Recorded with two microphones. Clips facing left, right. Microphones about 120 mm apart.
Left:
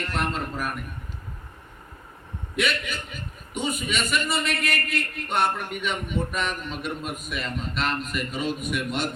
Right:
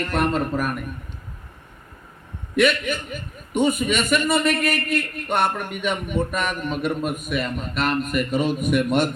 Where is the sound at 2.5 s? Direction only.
50° right (ahead or behind).